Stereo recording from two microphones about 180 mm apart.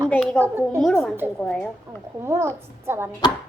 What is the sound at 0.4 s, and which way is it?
Speech, 15° right (ahead or behind).